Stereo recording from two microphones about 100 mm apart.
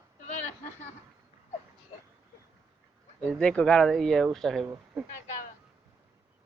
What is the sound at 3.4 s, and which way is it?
Speech, 10° left (ahead or behind).